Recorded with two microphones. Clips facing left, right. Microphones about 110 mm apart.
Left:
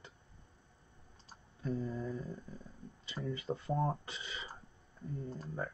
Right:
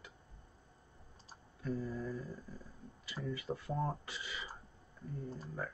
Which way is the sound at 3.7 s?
5° left (ahead or behind).